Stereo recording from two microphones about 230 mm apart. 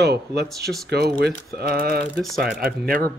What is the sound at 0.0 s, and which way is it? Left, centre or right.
Speech, right.